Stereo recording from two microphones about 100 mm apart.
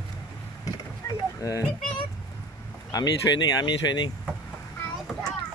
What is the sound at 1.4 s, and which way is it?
Speech, 35° left (ahead or behind).